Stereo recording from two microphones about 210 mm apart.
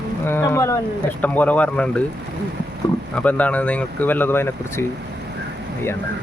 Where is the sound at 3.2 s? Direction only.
5° left (ahead or behind).